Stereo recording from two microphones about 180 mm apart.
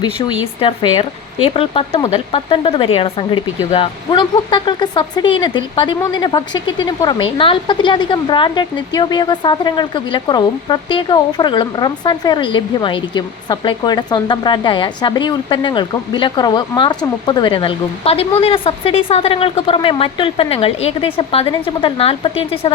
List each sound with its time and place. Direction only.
0.0 s speech: 25° left (ahead or behind)